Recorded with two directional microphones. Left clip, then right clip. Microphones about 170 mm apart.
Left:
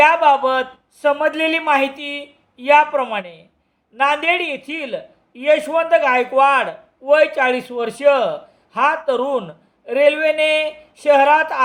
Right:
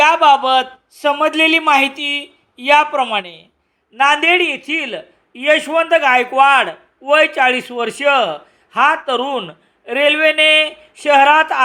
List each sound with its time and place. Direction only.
0.0 s a man's voice: 25° right (ahead or behind)